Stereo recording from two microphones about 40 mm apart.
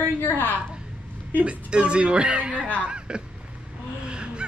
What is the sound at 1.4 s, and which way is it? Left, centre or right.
Speech, right.